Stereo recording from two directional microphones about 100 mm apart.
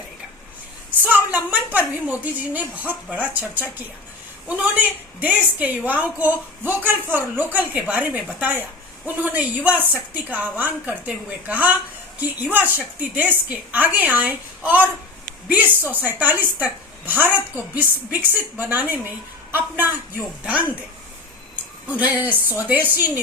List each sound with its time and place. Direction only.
0.9 s a sound: 15° right (ahead or behind)
2.5 s a woman's voice: 15° right (ahead or behind)
21.5 s a woman's voice: 15° right (ahead or behind)